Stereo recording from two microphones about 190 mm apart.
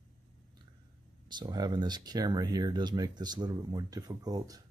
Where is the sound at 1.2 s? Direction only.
25° right (ahead or behind).